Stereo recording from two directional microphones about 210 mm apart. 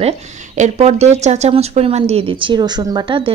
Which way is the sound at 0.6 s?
30° right (ahead or behind).